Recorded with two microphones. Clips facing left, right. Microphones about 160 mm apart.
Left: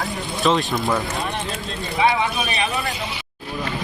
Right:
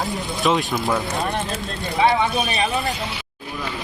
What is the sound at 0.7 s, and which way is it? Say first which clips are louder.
Speech: even; centre (ahead or behind).